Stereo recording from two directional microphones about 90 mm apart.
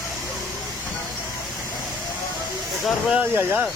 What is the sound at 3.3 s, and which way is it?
Speech, 25° right (ahead or behind).